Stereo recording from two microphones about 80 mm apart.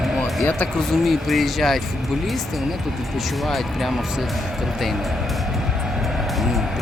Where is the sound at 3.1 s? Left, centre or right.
Centre.